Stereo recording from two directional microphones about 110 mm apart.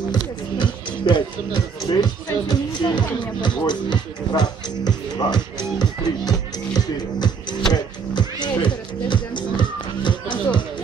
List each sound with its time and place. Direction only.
0.1 s music: 45° left (ahead or behind)
3.3 s speech: 45° left (ahead or behind)
6.7 s music: 40° left (ahead or behind)